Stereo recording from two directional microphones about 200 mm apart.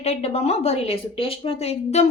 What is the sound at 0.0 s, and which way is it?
A woman's voice, 30° left (ahead or behind).